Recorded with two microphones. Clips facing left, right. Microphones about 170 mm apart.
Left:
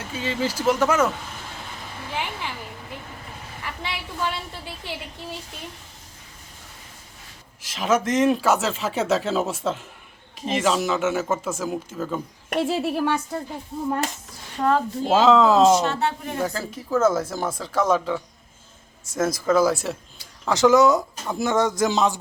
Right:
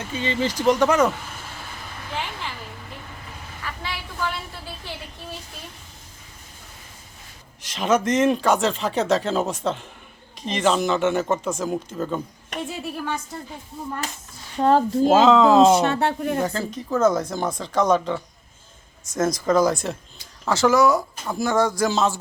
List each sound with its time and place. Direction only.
0.0 s speech: 5° left (ahead or behind)
3.6 s a woman's voice: 20° left (ahead or behind)
7.6 s speech: centre (ahead or behind)
12.5 s speech: 90° left; by 13.1 s 70° left (ahead or behind)
14.6 s a woman's voice: 35° right (ahead or behind)
15.1 s speech: centre (ahead or behind)
15.7 s speech: 60° right (ahead or behind)
16.4 s speech: 5° left (ahead or behind)
20.5 s speech: 20° left (ahead or behind)